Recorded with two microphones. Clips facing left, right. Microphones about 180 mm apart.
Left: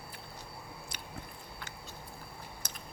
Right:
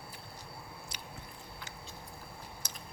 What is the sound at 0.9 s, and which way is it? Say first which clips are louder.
Squish: left 1 dB; 55° left (ahead or behind).